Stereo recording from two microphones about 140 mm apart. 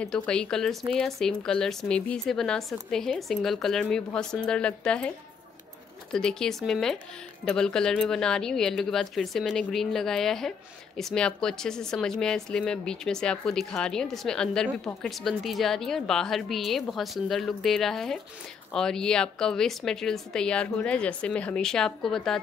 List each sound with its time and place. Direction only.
0.0 s a woman's voice: 5° left (ahead or behind)
6.1 s a woman's voice: 5° left (ahead or behind)